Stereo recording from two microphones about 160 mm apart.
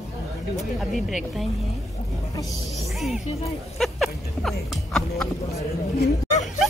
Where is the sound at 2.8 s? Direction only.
Centre (ahead or behind).